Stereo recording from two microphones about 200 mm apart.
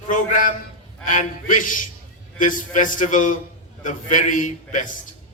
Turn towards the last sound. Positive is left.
turn(degrees=40)  # may be behind; listen again after turning